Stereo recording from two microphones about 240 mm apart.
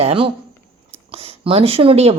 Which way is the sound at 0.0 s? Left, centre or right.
Right.